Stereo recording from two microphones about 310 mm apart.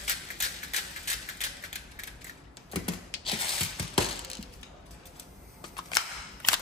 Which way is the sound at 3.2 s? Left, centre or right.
Centre.